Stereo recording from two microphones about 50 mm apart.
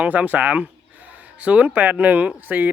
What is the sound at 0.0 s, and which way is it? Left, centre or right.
Speech, right.